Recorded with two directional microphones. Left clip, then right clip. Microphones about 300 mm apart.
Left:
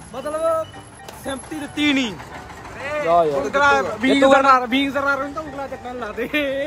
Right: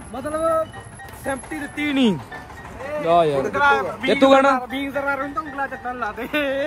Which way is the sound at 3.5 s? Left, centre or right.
Centre.